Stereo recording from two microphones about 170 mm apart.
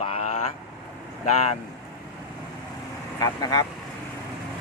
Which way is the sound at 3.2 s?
20° left (ahead or behind).